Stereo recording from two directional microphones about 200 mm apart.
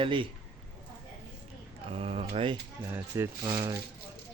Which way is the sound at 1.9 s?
30° right (ahead or behind).